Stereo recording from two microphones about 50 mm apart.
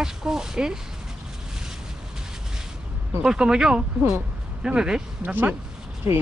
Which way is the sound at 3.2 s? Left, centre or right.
Centre.